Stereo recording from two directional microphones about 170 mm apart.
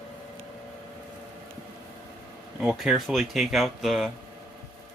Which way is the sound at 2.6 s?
Centre (ahead or behind).